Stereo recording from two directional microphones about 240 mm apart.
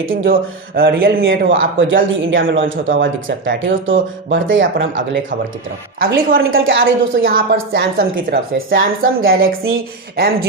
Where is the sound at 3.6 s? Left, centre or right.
Right.